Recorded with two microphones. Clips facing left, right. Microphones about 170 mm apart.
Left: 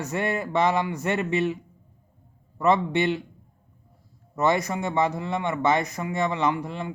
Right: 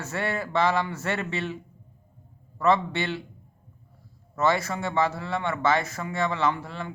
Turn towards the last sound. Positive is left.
turn(degrees=15)  # may be behind; listen again after turning